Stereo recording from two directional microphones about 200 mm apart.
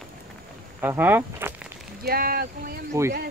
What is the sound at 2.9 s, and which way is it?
Speech, 15° right (ahead or behind).